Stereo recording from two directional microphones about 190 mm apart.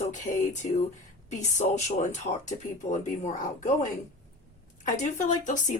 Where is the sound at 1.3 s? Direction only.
40° left (ahead or behind).